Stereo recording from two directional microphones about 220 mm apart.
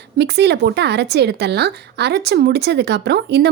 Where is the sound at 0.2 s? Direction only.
50° right (ahead or behind).